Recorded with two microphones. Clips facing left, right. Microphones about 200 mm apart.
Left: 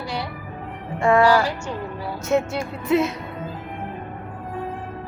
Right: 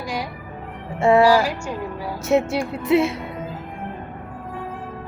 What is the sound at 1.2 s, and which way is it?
Music, 10° right (ahead or behind).